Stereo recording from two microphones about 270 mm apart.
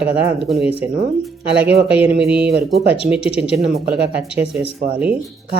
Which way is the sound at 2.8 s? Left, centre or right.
Centre.